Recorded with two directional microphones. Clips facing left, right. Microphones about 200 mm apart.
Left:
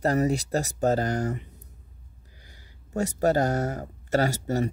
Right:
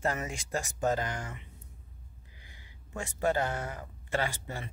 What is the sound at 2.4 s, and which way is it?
Speech, 40° left (ahead or behind).